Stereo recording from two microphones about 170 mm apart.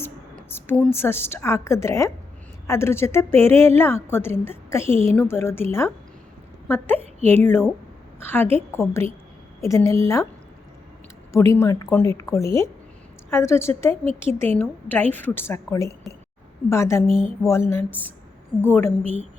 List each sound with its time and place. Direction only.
0.0 s a woman's voice: 15° left (ahead or behind)
7.2 s a woman's voice: 40° right (ahead or behind)
7.4 s a woman's voice: 10° left (ahead or behind)
11.3 s a woman's voice: 15° left (ahead or behind)